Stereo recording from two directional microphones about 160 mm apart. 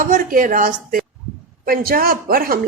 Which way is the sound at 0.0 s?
55° right (ahead or behind).